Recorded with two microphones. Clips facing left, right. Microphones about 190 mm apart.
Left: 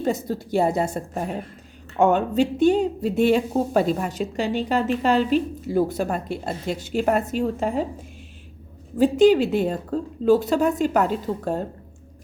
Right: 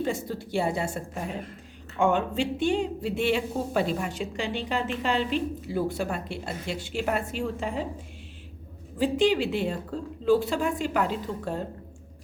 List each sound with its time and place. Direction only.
0.0 s speech: 40° left (ahead or behind)
9.0 s speech: 45° left (ahead or behind)